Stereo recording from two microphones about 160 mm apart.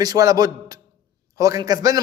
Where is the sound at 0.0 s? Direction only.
25° right (ahead or behind).